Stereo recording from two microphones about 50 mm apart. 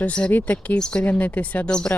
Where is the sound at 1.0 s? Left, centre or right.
Left.